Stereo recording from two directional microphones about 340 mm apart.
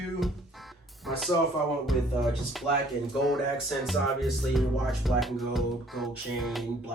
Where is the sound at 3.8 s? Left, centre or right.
Centre.